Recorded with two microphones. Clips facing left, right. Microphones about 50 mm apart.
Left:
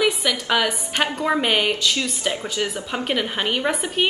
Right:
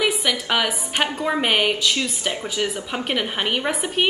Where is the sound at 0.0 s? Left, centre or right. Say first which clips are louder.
Left 1 dB; centre.